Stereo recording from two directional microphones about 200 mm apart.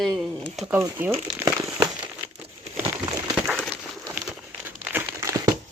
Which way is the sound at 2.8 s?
15° right (ahead or behind).